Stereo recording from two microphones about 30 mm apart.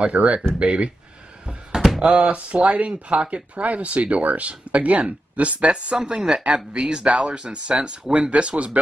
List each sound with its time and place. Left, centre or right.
0.0 s speech: right
2.0 s speech: right
6.0 s speech: right